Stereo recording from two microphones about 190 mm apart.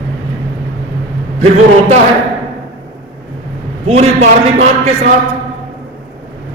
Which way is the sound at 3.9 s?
35° right (ahead or behind).